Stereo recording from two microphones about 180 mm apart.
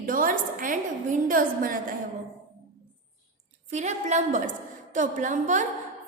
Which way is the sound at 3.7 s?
40° right (ahead or behind).